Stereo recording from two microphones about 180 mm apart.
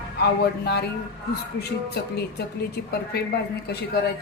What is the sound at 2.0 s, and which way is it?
A woman's voice, 60° left (ahead or behind).